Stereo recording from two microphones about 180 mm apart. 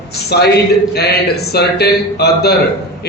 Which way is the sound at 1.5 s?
65° left (ahead or behind).